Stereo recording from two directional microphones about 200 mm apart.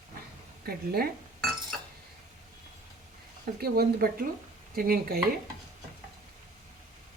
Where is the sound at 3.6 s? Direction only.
50° right (ahead or behind).